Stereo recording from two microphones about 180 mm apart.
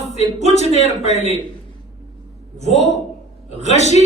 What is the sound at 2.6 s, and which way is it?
Speech, 35° right (ahead or behind).